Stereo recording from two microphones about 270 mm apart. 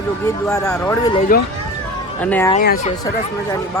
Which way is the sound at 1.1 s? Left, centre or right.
Left.